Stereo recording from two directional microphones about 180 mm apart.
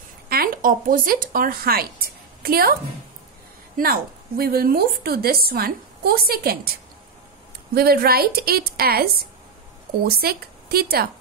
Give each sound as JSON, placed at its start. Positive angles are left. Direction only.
{"t": 0.3, "sound": "speech", "side_deg": -55}
{"t": 3.7, "sound": "a woman's voice", "side_deg": -55}
{"t": 7.7, "sound": "a woman's voice", "side_deg": -60}